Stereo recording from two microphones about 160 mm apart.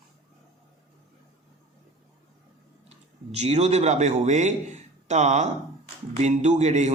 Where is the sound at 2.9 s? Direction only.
45° right (ahead or behind).